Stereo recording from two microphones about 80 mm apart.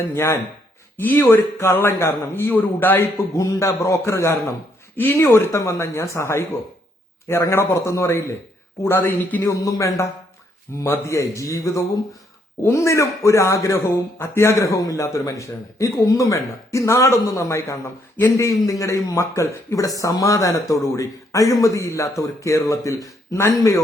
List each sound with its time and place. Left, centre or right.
0.1 s a man's voice: left
3.3 s a man's voice: left
9.5 s speech: left
14.7 s speech: left